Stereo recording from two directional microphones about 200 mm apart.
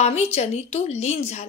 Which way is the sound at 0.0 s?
35° left (ahead or behind).